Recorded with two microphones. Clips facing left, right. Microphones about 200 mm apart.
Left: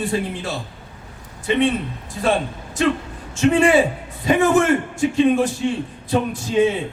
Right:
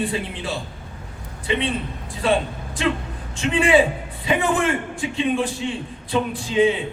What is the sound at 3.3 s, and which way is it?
A man's voice, 45° left (ahead or behind).